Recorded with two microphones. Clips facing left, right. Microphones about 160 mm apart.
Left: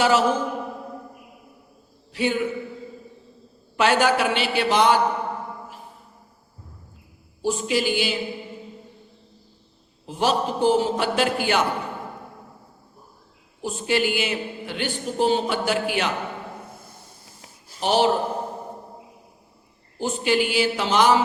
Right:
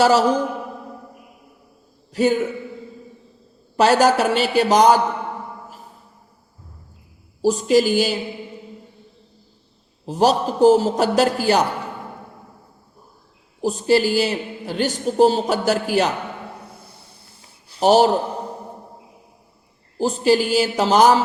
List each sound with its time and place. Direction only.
0.0 s a man's voice: 40° right (ahead or behind)
2.1 s a man's voice: 40° right (ahead or behind)
3.8 s a man's voice: 40° right (ahead or behind)
7.4 s a man's voice: 40° right (ahead or behind)
10.1 s a man's voice: 40° right (ahead or behind)
13.6 s a man's voice: 40° right (ahead or behind)
16.8 s a sound: 45° left (ahead or behind)
17.7 s a man's voice: 40° right (ahead or behind)
20.0 s a man's voice: 35° right (ahead or behind)